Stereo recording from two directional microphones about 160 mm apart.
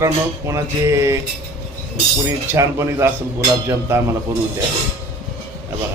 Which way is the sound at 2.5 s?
15° right (ahead or behind).